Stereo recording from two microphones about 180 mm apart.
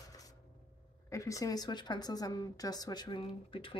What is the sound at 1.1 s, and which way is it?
A woman's voice, 15° left (ahead or behind).